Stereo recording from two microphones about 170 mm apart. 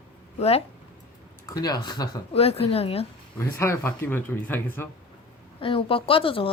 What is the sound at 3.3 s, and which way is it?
Speech, 15° left (ahead or behind).